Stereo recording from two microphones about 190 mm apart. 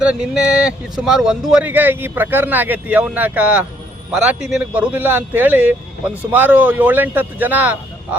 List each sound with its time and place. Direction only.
0.0 s speech: 5° right (ahead or behind)